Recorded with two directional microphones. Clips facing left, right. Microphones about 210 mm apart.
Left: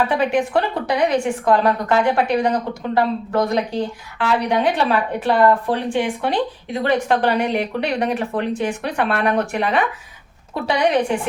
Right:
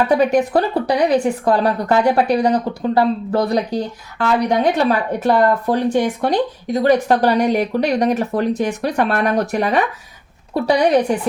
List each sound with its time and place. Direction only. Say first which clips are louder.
0.1 s speech: right 4 dB; 40° right (ahead or behind)